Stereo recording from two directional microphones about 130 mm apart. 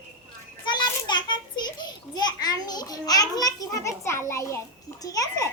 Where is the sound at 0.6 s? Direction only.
35° left (ahead or behind).